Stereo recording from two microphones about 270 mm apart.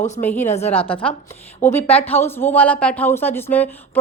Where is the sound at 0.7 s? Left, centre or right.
Centre.